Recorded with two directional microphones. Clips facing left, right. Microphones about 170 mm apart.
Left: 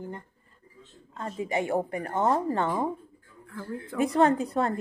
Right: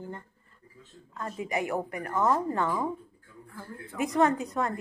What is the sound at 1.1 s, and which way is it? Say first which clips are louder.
A woman's voice: left 2 dB; 25° left (ahead or behind).